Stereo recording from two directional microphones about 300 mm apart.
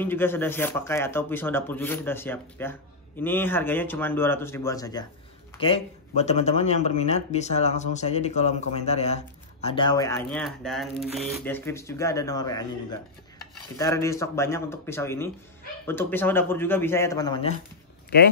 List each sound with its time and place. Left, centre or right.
0.0 s a man's voice: centre
13.7 s a man's voice: centre